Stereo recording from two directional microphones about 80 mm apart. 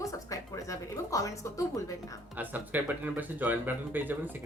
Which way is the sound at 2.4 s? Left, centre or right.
Right.